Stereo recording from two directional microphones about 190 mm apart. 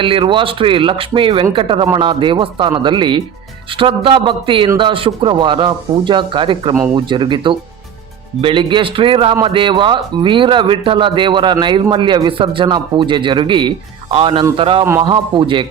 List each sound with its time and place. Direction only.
0.0 s speech: 25° right (ahead or behind)